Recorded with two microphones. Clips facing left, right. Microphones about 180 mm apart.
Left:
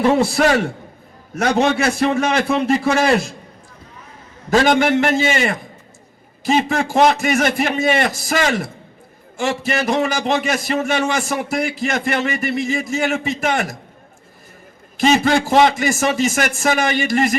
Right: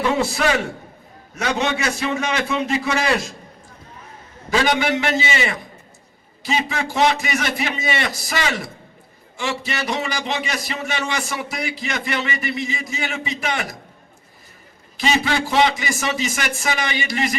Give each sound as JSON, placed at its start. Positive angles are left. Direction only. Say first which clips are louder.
{"t": 0.3, "sound": "a man's voice", "louder": "left 5 dB", "side_deg": 50}
{"t": 4.5, "sound": "a man's voice", "louder": "left 5 dB", "side_deg": 45}
{"t": 14.9, "sound": "a man's voice", "louder": "left 6 dB", "side_deg": 50}